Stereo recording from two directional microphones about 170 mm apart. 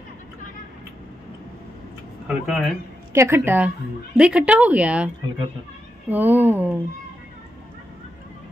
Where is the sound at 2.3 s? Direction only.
Centre (ahead or behind).